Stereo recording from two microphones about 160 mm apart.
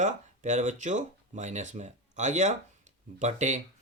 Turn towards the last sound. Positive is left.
turn(degrees=-45)  # may be behind; listen again after turning